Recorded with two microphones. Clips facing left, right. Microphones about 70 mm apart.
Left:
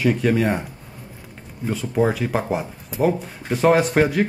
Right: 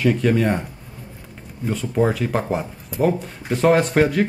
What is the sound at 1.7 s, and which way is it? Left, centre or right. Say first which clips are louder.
Speech: even; centre.